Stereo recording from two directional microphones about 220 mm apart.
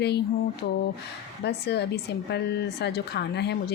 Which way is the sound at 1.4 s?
50° left (ahead or behind).